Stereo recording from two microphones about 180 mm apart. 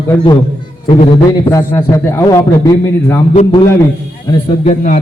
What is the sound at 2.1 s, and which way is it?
A man's voice, 15° left (ahead or behind).